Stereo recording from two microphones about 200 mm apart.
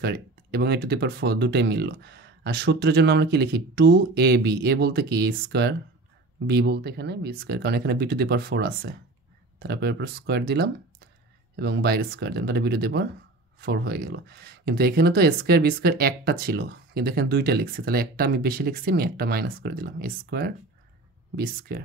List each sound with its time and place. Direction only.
0.0 s speech: 50° right (ahead or behind)